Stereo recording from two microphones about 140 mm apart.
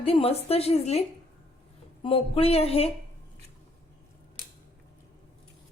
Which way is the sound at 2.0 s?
40° left (ahead or behind).